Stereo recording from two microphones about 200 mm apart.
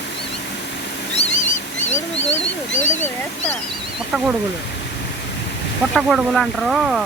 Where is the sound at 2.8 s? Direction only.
35° left (ahead or behind).